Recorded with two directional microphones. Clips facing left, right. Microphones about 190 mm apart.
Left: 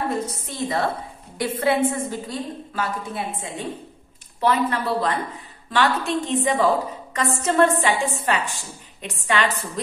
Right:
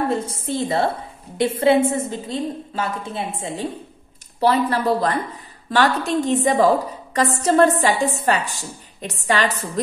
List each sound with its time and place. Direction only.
0.1 s a woman's voice: 30° right (ahead or behind)